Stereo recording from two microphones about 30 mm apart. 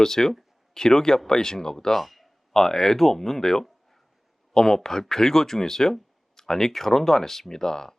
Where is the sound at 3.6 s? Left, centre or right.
Centre.